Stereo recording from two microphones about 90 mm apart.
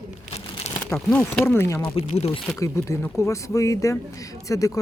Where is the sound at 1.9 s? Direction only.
90° left.